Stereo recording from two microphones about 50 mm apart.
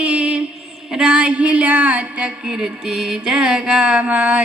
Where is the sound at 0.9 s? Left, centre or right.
Centre.